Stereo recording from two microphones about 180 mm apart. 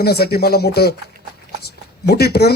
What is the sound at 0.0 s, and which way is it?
Speech, 65° left (ahead or behind).